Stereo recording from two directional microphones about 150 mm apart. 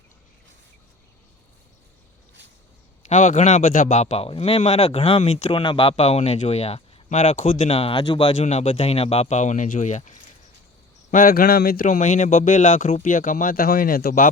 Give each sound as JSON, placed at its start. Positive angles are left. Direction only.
{"t": 3.1, "sound": "speech", "side_deg": 55}
{"t": 8.4, "sound": "speech", "side_deg": 45}
{"t": 11.1, "sound": "a man's voice", "side_deg": 75}
{"t": 11.9, "sound": "speech", "side_deg": 55}